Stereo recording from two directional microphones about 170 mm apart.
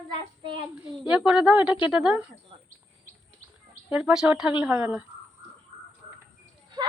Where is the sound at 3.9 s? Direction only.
5° right (ahead or behind).